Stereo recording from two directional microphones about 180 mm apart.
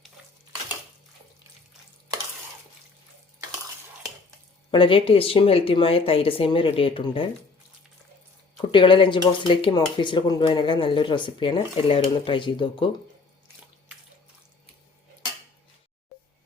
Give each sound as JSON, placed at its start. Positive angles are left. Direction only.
{"t": 4.7, "sound": "speech", "side_deg": 30}
{"t": 8.6, "sound": "speech", "side_deg": 30}